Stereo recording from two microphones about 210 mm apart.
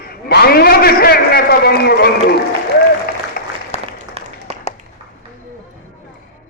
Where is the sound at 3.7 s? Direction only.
30° left (ahead or behind).